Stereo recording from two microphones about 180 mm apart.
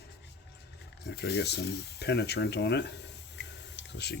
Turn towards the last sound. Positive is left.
turn(degrees=70)  # may be behind; listen again after turning